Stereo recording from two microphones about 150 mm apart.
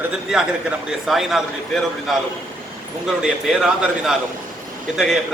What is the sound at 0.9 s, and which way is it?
A man's voice, centre (ahead or behind).